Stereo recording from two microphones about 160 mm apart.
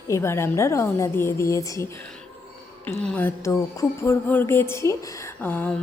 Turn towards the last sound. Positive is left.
turn(degrees=10)  # may be behind; listen again after turning